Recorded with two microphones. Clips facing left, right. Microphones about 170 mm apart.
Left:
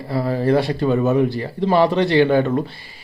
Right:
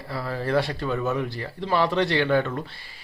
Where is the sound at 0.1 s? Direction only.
25° left (ahead or behind).